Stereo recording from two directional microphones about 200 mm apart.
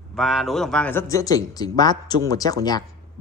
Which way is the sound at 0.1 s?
Centre (ahead or behind).